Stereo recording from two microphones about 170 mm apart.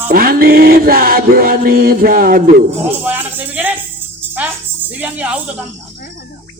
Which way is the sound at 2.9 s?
10° right (ahead or behind).